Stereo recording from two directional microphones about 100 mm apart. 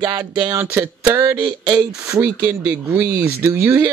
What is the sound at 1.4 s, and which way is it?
Speech, 45° right (ahead or behind).